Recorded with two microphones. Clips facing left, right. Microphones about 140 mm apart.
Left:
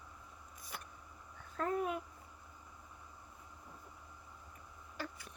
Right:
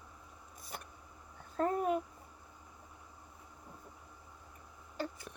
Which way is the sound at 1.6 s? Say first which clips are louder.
Right 4 dB; 35° right (ahead or behind).